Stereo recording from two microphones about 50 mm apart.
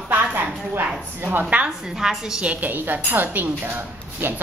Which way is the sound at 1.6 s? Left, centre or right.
Centre.